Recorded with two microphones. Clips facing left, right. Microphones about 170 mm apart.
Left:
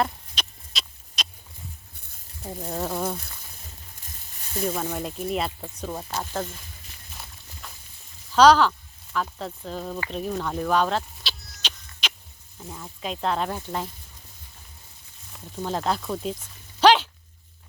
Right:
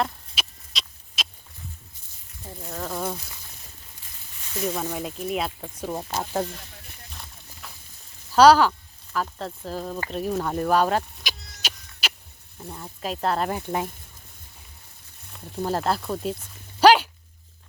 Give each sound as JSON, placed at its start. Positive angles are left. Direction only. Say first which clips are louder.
{"t": 0.0, "sound": "rodents", "louder": "left 1 dB", "side_deg": 0}
{"t": 2.4, "sound": "speech", "louder": "left 5 dB", "side_deg": 25}
{"t": 2.8, "sound": "speech", "louder": "left 1 dB", "side_deg": 0}
{"t": 4.6, "sound": "speech", "louder": "even", "side_deg": 0}
{"t": 5.9, "sound": "speech", "louder": "right 3 dB", "side_deg": -15}
{"t": 7.6, "sound": "a sound", "louder": "even", "side_deg": -5}
{"t": 8.4, "sound": "speech", "louder": "right 1 dB", "side_deg": -10}
{"t": 10.1, "sound": "a sound", "louder": "right 4 dB", "side_deg": -5}
{"t": 12.5, "sound": "speech", "louder": "right 1 dB", "side_deg": 0}
{"t": 15.5, "sound": "speech", "louder": "right 2 dB", "side_deg": -5}
{"t": 16.8, "sound": "dog", "louder": "right 2 dB", "side_deg": -10}